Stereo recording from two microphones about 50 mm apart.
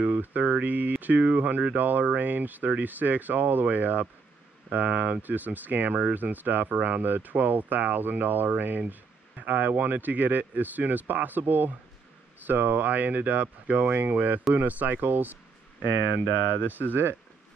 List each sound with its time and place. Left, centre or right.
0.0 s speech: right
1.8 s speech: right
16.6 s speech: left
16.9 s speech: right